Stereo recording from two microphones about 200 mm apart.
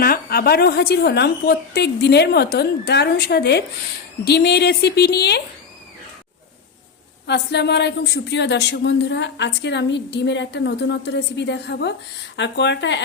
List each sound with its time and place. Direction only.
0.0 s a woman's voice: 50° left (ahead or behind)
7.3 s speech: 60° left (ahead or behind)